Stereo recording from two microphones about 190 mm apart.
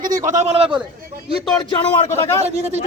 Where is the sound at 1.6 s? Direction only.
25° left (ahead or behind).